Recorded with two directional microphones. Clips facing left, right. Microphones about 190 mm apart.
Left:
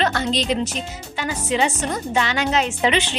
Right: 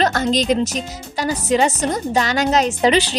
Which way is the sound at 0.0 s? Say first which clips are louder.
Right 4 dB; 40° right (ahead or behind).